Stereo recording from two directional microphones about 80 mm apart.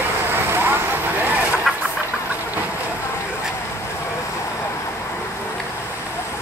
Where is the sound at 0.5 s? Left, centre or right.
Right.